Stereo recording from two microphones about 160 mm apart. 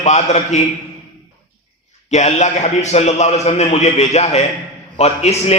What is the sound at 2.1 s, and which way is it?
A man's voice, 45° left (ahead or behind).